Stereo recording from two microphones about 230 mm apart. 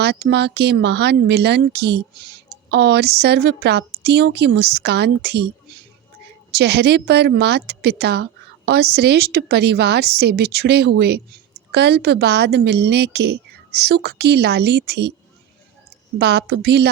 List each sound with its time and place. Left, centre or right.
0.0 s speech: right
6.5 s speech: right
16.1 s speech: right